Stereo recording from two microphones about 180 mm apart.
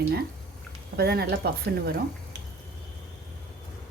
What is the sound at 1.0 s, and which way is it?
Speech, 60° right (ahead or behind).